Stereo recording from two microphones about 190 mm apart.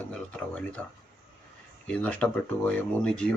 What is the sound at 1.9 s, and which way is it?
Speech, 5° left (ahead or behind).